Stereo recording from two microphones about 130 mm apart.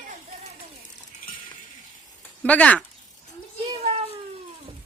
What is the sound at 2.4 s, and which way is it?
Speech, 10° left (ahead or behind).